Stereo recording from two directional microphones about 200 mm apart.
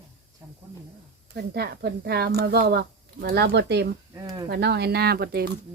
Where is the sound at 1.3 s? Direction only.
55° right (ahead or behind).